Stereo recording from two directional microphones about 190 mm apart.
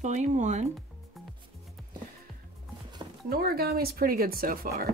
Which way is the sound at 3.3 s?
55° right (ahead or behind).